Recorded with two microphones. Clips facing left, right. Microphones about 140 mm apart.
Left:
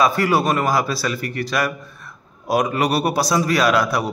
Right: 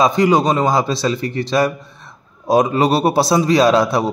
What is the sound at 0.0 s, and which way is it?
Speech, 20° right (ahead or behind).